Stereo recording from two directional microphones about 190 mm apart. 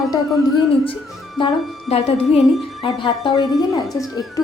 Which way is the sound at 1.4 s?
30° left (ahead or behind).